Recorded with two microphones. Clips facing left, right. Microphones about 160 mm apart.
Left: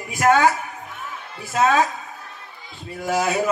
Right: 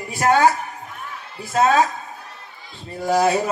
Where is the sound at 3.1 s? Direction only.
40° right (ahead or behind).